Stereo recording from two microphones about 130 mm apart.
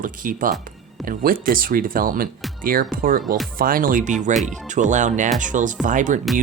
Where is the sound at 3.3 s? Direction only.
Centre (ahead or behind).